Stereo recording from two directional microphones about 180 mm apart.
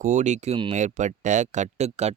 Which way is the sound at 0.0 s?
45° right (ahead or behind).